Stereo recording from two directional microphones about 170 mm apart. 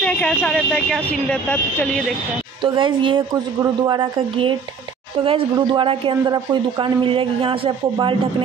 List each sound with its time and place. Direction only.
0.0 s speech: 5° left (ahead or behind)
2.6 s speech: 30° right (ahead or behind)